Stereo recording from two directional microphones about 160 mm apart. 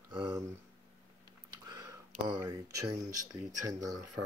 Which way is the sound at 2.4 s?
20° right (ahead or behind).